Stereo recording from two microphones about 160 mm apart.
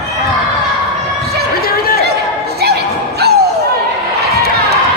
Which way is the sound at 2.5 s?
90° right.